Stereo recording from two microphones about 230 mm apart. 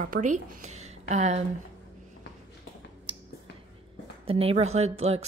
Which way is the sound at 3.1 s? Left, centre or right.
Right.